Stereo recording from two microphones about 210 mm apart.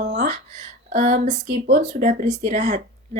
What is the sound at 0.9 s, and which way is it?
Speech, 35° right (ahead or behind).